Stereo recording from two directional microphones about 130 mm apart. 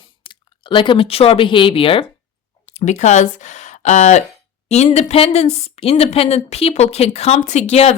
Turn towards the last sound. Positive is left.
turn(degrees=55)  # may be behind; listen again after turning